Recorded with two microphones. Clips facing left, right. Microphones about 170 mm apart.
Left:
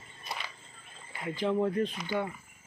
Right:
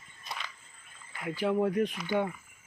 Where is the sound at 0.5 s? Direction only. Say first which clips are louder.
Left 5 dB; 30° left (ahead or behind).